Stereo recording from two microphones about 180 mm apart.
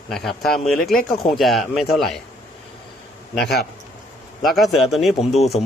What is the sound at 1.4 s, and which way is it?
Speech, centre (ahead or behind).